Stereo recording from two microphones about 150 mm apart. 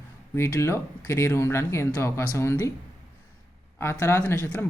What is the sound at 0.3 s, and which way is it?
Speech, 20° left (ahead or behind).